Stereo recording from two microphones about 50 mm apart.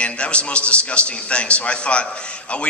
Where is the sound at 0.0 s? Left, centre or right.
Left.